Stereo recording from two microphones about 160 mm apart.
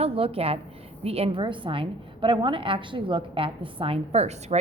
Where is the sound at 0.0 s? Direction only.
35° right (ahead or behind).